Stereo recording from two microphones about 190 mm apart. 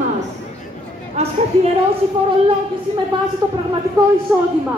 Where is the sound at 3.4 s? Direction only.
20° right (ahead or behind).